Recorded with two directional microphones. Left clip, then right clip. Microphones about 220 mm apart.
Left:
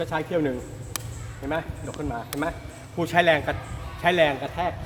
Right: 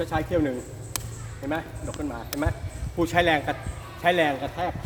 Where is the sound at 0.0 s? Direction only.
15° left (ahead or behind).